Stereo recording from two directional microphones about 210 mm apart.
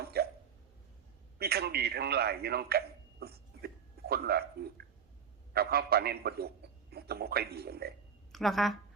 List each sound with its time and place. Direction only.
0.0 s hiccup: 50° right (ahead or behind)
1.4 s a sound: 50° right (ahead or behind)
5.5 s speech: 45° right (ahead or behind)
8.3 s a woman's voice: centre (ahead or behind)